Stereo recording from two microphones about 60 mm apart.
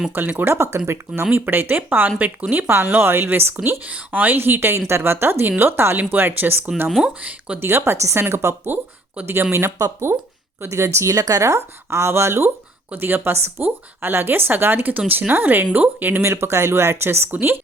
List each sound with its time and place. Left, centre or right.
0.1 s speech: right
0.5 s speech: right
3.8 s speech: right
6.8 s speech: centre
7.1 s speech: right
7.6 s speech: right
8.6 s speech: right
12.9 s speech: right
16.2 s speech: right